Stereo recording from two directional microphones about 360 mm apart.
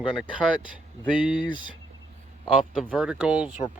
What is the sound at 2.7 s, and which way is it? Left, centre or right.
Speech, centre.